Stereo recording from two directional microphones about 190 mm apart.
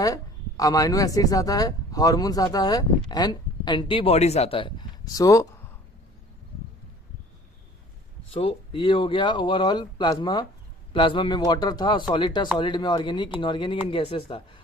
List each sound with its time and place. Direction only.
0.0 s speech: 20° left (ahead or behind)
8.3 s speech: 30° left (ahead or behind)